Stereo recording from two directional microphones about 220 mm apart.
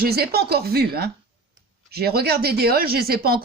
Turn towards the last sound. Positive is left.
turn(degrees=-45)  # may be behind; listen again after turning